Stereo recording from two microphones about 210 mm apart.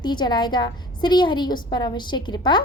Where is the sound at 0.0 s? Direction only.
20° left (ahead or behind).